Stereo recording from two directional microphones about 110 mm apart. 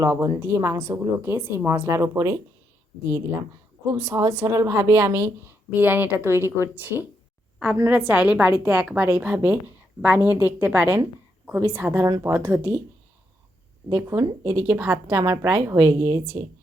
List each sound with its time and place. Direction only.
0.0 s a woman's voice: 25° right (ahead or behind)
3.9 s a woman's voice: 25° right (ahead or behind)
13.9 s a woman's voice: 25° right (ahead or behind)
15.9 s a woman's voice: 30° right (ahead or behind)